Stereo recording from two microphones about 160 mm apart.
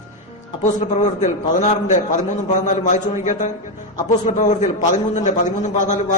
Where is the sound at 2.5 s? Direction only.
50° left (ahead or behind).